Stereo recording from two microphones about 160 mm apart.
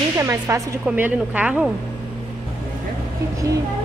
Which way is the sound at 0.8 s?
10° right (ahead or behind).